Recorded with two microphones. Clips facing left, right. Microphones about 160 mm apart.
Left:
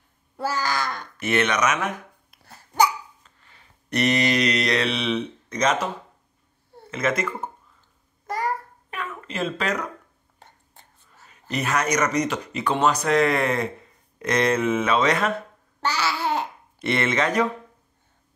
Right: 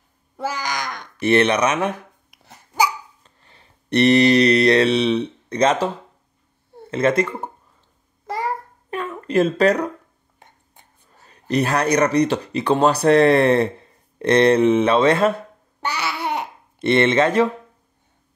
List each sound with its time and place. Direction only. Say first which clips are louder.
0.5 s babbling: left 1 dB; 15° right (ahead or behind)
1.2 s speech: right 6 dB; 30° right (ahead or behind)
2.3 s babbling: right 2 dB; 15° right (ahead or behind)
3.4 s speech: right 9 dB; 30° right (ahead or behind)
6.9 s speech: right 6 dB; 30° right (ahead or behind)
8.9 s a sound: right 12 dB; 35° right (ahead or behind)
11.1 s speech: right 9 dB; 35° right (ahead or behind)
15.9 s babbling: even; 65° right (ahead or behind)
16.3 s babbling: even; 25° right (ahead or behind)